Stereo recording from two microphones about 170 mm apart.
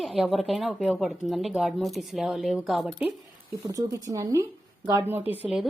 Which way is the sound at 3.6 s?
20° right (ahead or behind).